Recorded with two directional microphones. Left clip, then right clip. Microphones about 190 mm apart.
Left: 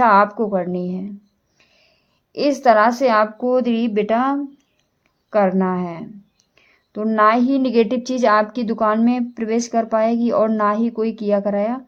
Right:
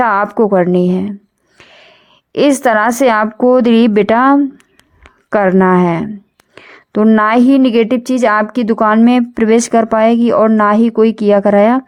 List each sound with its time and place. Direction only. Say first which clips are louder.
0.0 s a woman's voice: right 2 dB; 35° right (ahead or behind)